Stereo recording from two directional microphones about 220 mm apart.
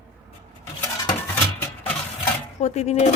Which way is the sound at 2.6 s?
30° left (ahead or behind).